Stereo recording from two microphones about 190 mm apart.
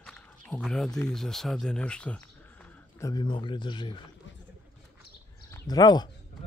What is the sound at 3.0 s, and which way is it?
Speech, 20° left (ahead or behind).